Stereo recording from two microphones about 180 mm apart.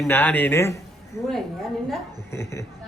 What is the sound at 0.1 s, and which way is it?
A man's voice, 10° left (ahead or behind).